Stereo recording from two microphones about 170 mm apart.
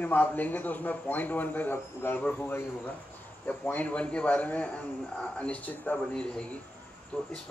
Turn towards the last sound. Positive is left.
turn(degrees=5)  # may be behind; listen again after turning